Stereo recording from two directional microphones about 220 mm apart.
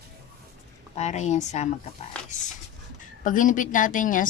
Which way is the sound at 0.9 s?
30° left (ahead or behind).